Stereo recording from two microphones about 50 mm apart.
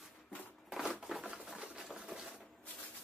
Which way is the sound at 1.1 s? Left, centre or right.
Centre.